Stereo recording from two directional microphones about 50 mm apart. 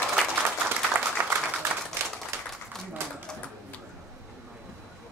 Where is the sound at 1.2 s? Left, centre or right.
Right.